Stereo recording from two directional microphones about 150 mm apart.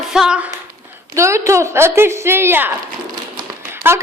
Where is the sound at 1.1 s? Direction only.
20° right (ahead or behind).